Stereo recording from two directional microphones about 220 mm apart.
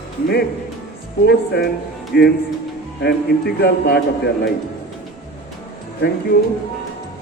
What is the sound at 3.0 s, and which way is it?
Speech, 45° left (ahead or behind).